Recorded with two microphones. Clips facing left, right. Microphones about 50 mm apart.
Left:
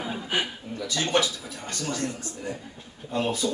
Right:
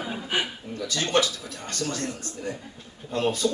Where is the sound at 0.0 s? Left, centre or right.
Centre.